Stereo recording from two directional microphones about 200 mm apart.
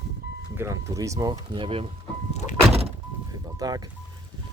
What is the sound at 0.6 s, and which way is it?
Speech, 15° right (ahead or behind).